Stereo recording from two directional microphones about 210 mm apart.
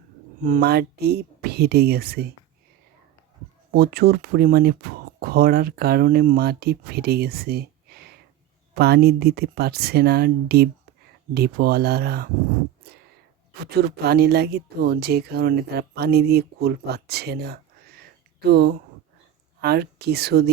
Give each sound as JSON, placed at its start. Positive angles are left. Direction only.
{"t": 0.4, "sound": "speech", "side_deg": -45}
{"t": 3.7, "sound": "speech", "side_deg": -45}
{"t": 13.7, "sound": "speech", "side_deg": -50}